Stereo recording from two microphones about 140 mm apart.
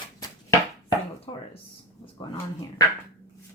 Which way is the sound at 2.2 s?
35° left (ahead or behind).